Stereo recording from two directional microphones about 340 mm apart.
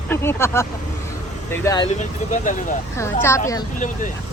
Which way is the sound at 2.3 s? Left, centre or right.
Left.